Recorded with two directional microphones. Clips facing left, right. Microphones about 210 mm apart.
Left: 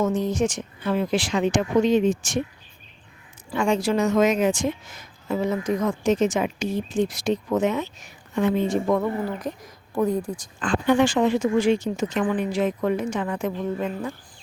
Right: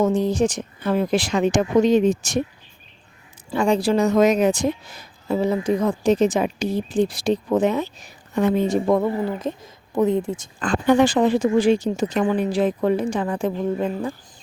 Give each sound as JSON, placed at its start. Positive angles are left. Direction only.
{"t": 0.0, "sound": "speech", "side_deg": -30}
{"t": 3.5, "sound": "speech", "side_deg": -35}
{"t": 10.6, "sound": "speech", "side_deg": -40}